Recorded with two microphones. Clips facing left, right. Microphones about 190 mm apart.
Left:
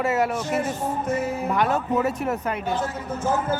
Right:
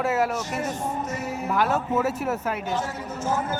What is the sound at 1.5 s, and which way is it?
Speech, 5° right (ahead or behind).